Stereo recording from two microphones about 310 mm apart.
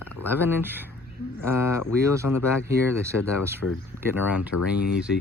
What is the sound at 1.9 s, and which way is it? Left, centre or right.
Speech, centre.